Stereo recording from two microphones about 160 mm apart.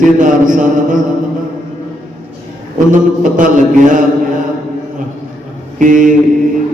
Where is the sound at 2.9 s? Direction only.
55° right (ahead or behind).